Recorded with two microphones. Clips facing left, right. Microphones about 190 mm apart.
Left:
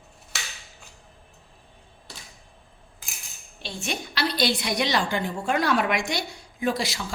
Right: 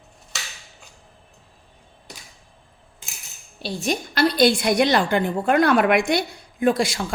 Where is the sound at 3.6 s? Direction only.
40° right (ahead or behind).